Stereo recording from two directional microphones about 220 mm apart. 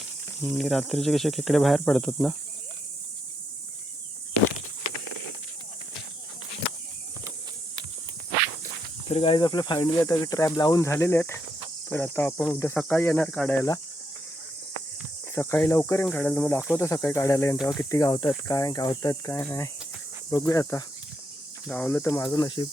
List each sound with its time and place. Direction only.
0.4 s speech: centre (ahead or behind)
9.0 s speech: 25° left (ahead or behind); by 13.7 s 5° left (ahead or behind)
15.4 s speech: 10° left (ahead or behind)